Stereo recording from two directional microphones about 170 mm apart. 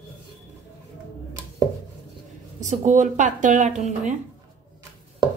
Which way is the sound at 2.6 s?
45° right (ahead or behind).